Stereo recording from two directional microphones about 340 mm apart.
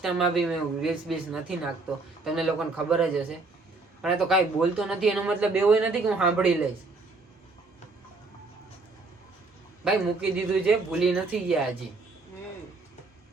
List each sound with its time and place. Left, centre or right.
0.0 s speech: centre
9.8 s speech: centre